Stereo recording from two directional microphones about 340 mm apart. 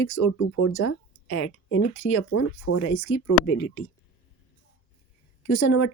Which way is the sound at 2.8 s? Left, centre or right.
Left.